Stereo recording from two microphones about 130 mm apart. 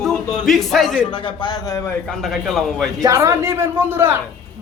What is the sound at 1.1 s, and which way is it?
Speech, 40° left (ahead or behind).